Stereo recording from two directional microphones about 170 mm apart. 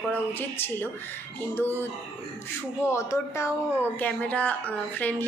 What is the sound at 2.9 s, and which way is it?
A woman's voice, 15° left (ahead or behind).